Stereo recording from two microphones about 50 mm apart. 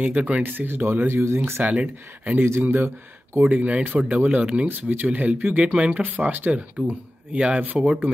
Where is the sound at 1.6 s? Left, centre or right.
Centre.